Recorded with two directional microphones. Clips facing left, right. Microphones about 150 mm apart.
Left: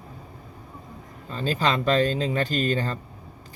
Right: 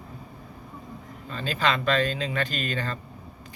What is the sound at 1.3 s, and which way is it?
Speech, 35° left (ahead or behind).